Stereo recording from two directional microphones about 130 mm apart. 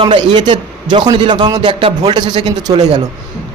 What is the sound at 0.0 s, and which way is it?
Speech, 35° right (ahead or behind).